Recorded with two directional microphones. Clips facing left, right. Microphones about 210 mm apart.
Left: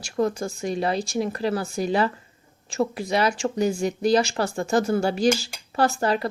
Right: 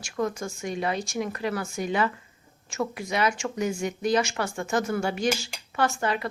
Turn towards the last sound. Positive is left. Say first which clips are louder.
# left 4 dB
turn(degrees=35)  # may be behind; listen again after turning